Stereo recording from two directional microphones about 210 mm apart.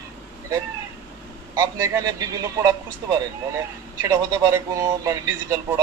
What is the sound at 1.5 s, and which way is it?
A man's voice, 15° right (ahead or behind).